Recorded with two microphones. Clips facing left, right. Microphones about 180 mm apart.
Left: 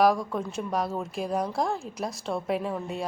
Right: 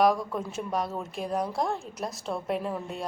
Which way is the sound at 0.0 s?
Centre (ahead or behind).